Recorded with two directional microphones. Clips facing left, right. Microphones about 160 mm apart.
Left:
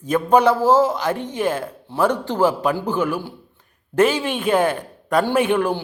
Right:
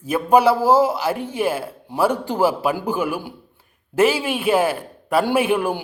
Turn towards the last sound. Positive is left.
turn(degrees=-10)  # may be behind; listen again after turning